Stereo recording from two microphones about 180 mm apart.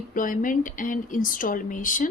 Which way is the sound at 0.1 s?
50° left (ahead or behind).